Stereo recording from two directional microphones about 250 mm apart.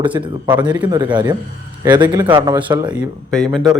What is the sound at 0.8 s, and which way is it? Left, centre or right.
Speech, centre.